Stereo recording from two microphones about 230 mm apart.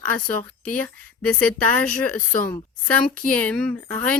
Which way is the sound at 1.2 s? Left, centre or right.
Centre.